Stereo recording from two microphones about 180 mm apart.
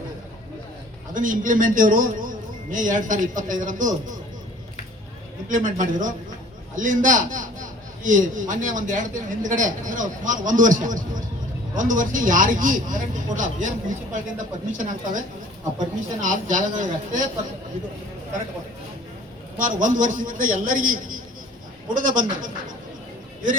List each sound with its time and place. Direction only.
1.1 s a man's voice: 50° right (ahead or behind)
5.5 s a man's voice: 45° right (ahead or behind)
16.2 s a man's voice: 45° right (ahead or behind)
19.5 s a man's voice: 45° right (ahead or behind)